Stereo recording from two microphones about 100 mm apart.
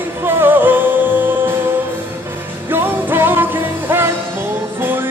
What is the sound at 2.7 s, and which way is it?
Music, 20° right (ahead or behind).